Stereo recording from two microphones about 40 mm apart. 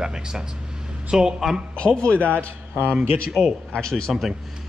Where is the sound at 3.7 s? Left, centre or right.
Centre.